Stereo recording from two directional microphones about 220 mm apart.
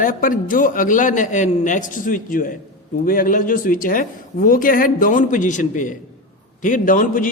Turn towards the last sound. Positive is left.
turn(degrees=40)  # may be behind; listen again after turning